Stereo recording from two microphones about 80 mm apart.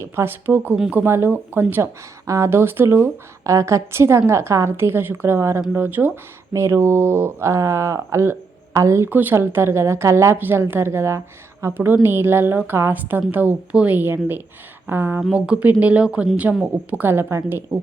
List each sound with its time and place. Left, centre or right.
0.0 s a woman's voice: right
2.2 s speech: right
5.7 s a woman's voice: right
6.5 s speech: right
9.0 s a woman's voice: right
15.3 s a woman's voice: centre; by 17.7 s right